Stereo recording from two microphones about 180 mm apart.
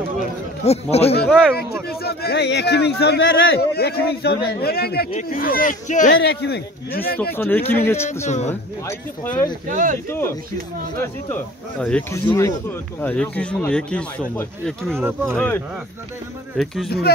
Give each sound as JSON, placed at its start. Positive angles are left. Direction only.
{"t": 0.7, "sound": "speech", "side_deg": 35}
{"t": 1.2, "sound": "speech", "side_deg": 0}
{"t": 1.9, "sound": "speech", "side_deg": 60}
{"t": 6.2, "sound": "speech", "side_deg": 65}
{"t": 7.3, "sound": "speech", "side_deg": 10}
{"t": 8.3, "sound": "speech", "side_deg": 40}
{"t": 8.8, "sound": "speech", "side_deg": 15}
{"t": 9.7, "sound": "speech", "side_deg": -45}
{"t": 10.0, "sound": "speech", "side_deg": 15}
{"t": 11.8, "sound": "speech", "side_deg": 10}
{"t": 15.0, "sound": "speech", "side_deg": -10}
{"t": 15.3, "sound": "speech", "side_deg": 10}